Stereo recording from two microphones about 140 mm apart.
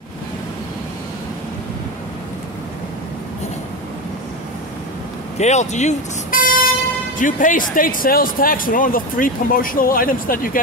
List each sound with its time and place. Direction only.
5.4 s speech: 55° left (ahead or behind); by 10.6 s 85° left